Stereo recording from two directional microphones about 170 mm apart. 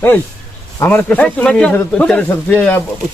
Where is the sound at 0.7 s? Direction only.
15° left (ahead or behind).